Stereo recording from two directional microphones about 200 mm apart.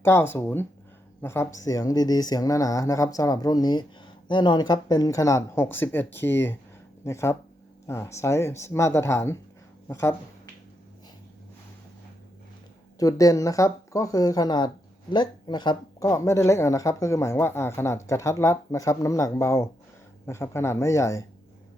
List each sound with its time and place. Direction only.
0.0 s speech: 10° left (ahead or behind)
13.0 s speech: 15° left (ahead or behind)